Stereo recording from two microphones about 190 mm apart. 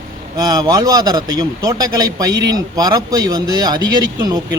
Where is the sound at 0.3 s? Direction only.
20° right (ahead or behind).